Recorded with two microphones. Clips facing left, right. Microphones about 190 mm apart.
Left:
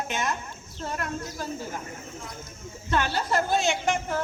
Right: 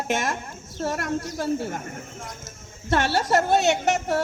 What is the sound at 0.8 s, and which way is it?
Speech, 45° right (ahead or behind).